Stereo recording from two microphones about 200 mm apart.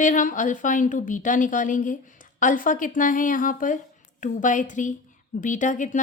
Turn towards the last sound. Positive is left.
turn(degrees=40)  # may be behind; listen again after turning